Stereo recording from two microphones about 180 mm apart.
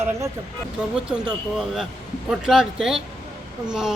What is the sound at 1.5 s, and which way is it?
A man's voice, centre (ahead or behind).